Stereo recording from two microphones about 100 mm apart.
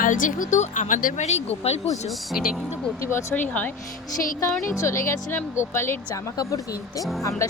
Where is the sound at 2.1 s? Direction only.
Centre (ahead or behind).